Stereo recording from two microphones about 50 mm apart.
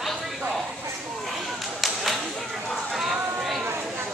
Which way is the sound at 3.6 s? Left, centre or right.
Right.